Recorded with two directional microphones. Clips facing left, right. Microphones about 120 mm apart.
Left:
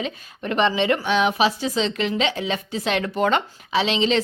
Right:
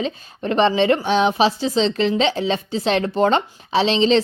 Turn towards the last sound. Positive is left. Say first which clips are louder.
# right 4 dB
turn(degrees=-30)  # may be behind; listen again after turning